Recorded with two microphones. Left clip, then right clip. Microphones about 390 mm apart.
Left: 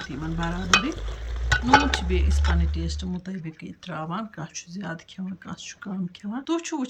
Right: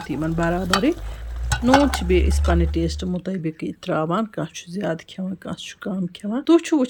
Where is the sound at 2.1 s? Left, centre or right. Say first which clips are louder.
Right 9 dB; centre.